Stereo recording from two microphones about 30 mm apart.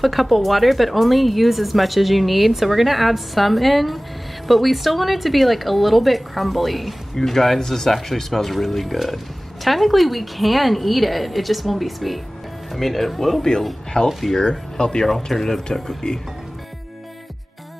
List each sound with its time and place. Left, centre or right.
0.0 s speech: centre
7.9 s speech: centre
13.4 s speech: centre
14.4 s speech: left
15.0 s speech: centre